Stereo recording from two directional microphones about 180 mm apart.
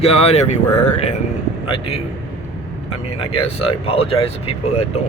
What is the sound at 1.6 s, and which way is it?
Speech, 30° left (ahead or behind).